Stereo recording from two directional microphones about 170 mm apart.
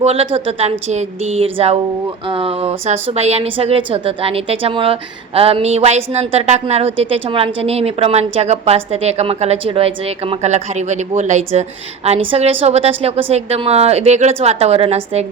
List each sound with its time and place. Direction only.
0.0 s speech: 35° right (ahead or behind)